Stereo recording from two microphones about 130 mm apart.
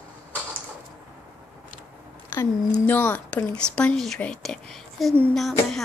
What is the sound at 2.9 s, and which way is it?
A woman's voice, 15° left (ahead or behind).